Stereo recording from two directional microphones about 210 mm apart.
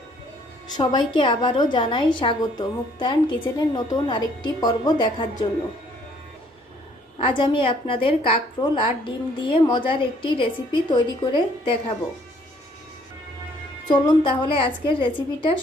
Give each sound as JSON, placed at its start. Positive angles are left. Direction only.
{"t": 0.8, "sound": "a woman's voice", "side_deg": 20}
{"t": 7.2, "sound": "a woman's voice", "side_deg": 25}
{"t": 13.8, "sound": "a woman's voice", "side_deg": 20}